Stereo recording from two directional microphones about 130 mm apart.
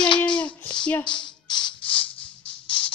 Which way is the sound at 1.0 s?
35° left (ahead or behind).